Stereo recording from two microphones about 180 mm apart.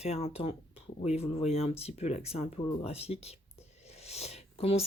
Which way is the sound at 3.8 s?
35° left (ahead or behind).